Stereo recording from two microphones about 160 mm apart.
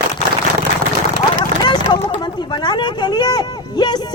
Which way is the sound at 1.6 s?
30° left (ahead or behind).